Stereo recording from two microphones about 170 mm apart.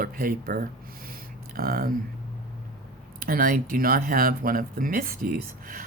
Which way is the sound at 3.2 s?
55° right (ahead or behind).